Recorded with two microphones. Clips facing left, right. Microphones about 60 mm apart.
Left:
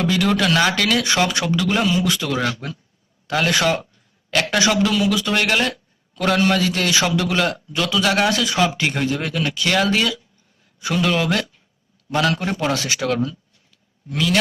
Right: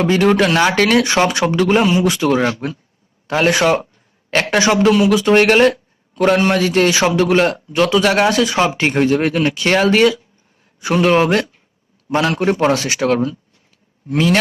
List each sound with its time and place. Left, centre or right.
0.0 s a man's voice: right
2.0 s a man's voice: right